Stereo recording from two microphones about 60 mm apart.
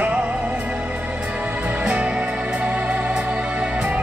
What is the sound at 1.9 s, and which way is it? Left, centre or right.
Music, centre.